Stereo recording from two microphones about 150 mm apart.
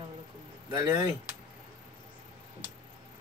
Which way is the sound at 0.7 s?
25° right (ahead or behind).